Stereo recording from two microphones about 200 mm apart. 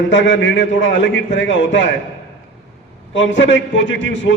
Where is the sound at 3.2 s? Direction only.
65° left (ahead or behind).